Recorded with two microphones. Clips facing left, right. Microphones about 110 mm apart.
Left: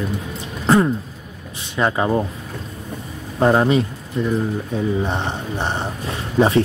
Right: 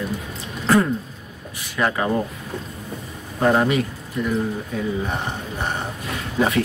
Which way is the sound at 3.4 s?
20° left (ahead or behind).